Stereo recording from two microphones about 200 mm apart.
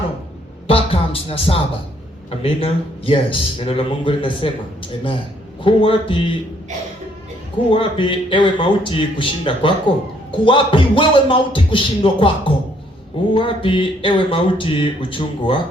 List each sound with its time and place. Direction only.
0.7 s music: 30° left (ahead or behind)
2.3 s speech: 30° left (ahead or behind)
7.7 s speech: 25° left (ahead or behind)